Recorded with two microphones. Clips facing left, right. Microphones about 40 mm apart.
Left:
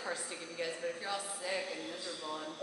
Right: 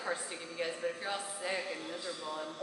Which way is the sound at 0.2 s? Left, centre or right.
Centre.